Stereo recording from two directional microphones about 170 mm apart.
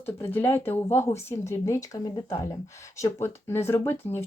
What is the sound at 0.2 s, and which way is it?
Speech, 10° left (ahead or behind).